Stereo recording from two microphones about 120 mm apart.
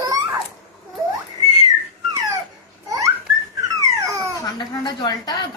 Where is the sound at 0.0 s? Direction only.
30° right (ahead or behind).